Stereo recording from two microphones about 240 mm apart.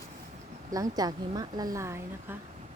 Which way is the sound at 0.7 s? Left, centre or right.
Centre.